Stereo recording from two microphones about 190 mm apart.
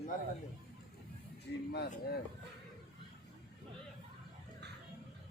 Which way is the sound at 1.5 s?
60° left (ahead or behind).